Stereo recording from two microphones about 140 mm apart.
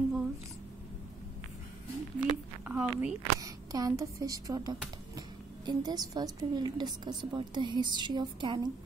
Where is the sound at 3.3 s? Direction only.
25° right (ahead or behind).